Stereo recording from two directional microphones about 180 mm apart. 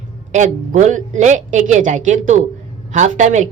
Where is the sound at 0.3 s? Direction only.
45° right (ahead or behind).